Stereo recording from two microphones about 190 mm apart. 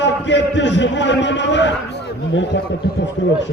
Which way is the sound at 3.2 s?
80° left.